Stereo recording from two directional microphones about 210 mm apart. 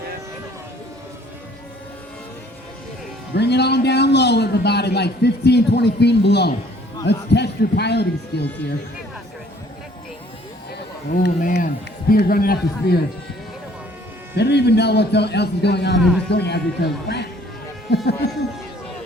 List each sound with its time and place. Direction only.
3.3 s a man's voice: 55° left (ahead or behind)
11.1 s a man's voice: 45° left (ahead or behind)
14.3 s a man's voice: 55° left (ahead or behind)